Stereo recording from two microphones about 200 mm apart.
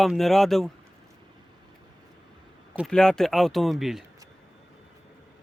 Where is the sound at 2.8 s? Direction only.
5° left (ahead or behind).